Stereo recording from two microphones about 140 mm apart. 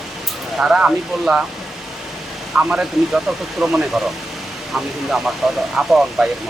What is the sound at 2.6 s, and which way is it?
Speech, 5° right (ahead or behind).